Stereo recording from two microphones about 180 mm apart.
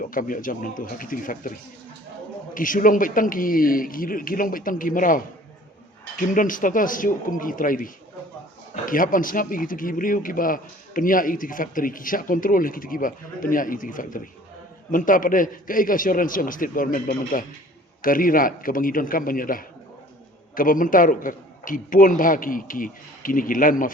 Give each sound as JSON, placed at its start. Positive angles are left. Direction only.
{"t": 0.0, "sound": "a man's voice", "side_deg": 50}
{"t": 2.6, "sound": "a man's voice", "side_deg": 50}